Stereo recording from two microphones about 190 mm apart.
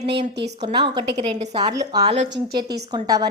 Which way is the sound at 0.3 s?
65° right (ahead or behind).